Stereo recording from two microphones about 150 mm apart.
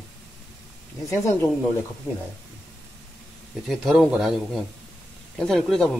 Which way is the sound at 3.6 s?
Centre (ahead or behind).